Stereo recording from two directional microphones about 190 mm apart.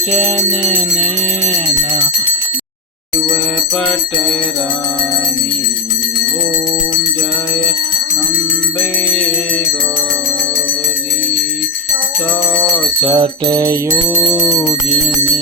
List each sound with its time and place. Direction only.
0.1 s music: 35° right (ahead or behind)
13.1 s music: 20° right (ahead or behind)